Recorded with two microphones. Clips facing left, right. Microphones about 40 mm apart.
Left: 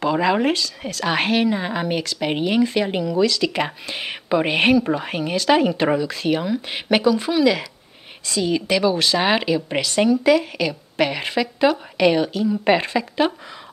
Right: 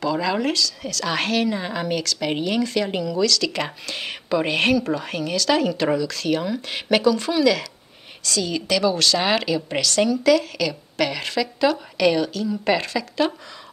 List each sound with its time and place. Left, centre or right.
0.0 s a woman's voice: left